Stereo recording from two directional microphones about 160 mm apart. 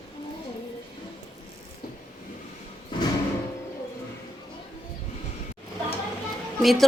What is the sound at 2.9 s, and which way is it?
Music, 30° left (ahead or behind).